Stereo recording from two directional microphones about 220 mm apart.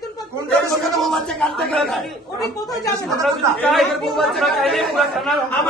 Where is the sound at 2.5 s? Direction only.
15° left (ahead or behind).